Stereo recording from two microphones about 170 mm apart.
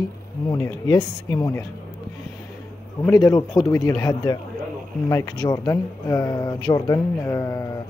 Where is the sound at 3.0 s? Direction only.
20° left (ahead or behind).